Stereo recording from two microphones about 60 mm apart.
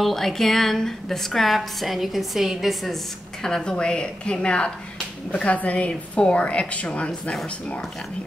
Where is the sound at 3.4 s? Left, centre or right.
Centre.